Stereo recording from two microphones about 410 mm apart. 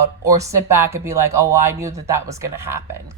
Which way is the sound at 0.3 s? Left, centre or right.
Centre.